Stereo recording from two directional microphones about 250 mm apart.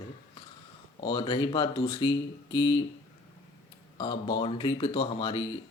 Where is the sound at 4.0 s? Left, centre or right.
Centre.